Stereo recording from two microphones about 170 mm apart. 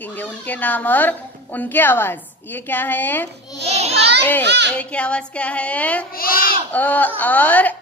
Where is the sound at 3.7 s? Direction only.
40° right (ahead or behind).